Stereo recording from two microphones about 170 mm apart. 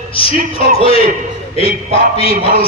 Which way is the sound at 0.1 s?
35° left (ahead or behind).